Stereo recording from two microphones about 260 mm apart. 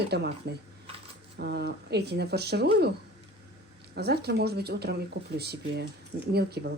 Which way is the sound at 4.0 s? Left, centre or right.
Right.